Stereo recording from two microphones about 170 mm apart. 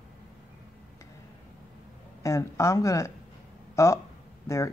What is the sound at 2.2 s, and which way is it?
Speech, 20° left (ahead or behind).